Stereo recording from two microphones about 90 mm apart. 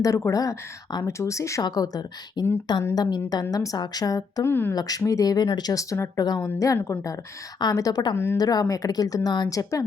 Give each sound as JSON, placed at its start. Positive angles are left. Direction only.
{"t": 0.0, "sound": "speech", "side_deg": 40}
{"t": 1.6, "sound": "speech", "side_deg": 50}
{"t": 4.4, "sound": "speech", "side_deg": 25}
{"t": 4.7, "sound": "speech", "side_deg": 45}
{"t": 8.1, "sound": "speech", "side_deg": 25}
{"t": 8.4, "sound": "speech", "side_deg": 45}